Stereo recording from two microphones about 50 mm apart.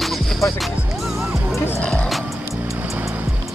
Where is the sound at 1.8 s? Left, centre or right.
Centre.